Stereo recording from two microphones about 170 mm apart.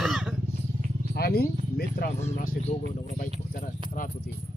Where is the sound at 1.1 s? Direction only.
65° left (ahead or behind).